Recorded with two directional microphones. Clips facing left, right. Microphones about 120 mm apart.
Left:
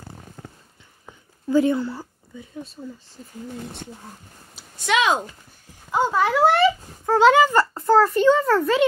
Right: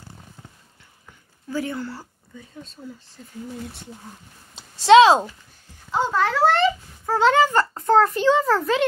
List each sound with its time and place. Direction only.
1.5 s speech: 20° left (ahead or behind)
2.8 s a child's voice: centre (ahead or behind)
4.8 s speech: 30° right (ahead or behind)
5.9 s a child's voice: 10° left (ahead or behind)